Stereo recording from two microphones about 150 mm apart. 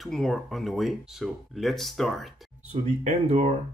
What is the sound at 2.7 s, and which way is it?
Speech, 45° right (ahead or behind).